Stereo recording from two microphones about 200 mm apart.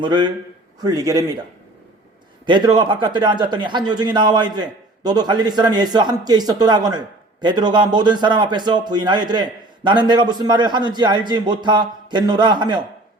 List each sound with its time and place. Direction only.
0.0 s speech: 25° right (ahead or behind)
2.5 s speech: 25° right (ahead or behind)